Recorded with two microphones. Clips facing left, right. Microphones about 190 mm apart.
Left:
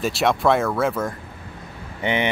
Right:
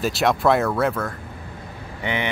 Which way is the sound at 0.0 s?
Centre (ahead or behind).